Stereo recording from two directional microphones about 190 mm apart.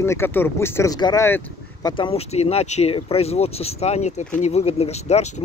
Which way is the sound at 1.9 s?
30° left (ahead or behind).